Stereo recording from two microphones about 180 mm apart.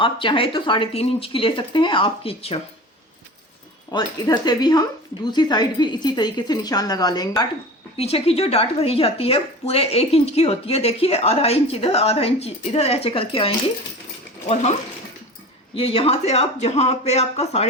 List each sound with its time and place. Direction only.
0.0 s speech: 30° left (ahead or behind)
3.9 s speech: 25° left (ahead or behind)
7.9 s speech: 35° left (ahead or behind)
15.7 s speech: 30° left (ahead or behind)